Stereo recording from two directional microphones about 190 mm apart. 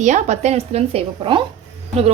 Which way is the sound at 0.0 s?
40° right (ahead or behind).